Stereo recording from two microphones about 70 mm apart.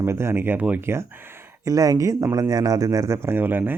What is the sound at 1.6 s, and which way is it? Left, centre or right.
Speech, right.